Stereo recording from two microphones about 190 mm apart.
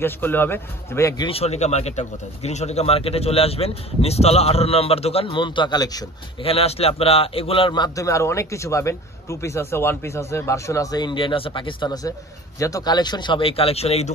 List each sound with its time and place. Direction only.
0.0 s a man's voice: 10° left (ahead or behind); by 14.1 s 35° left (ahead or behind)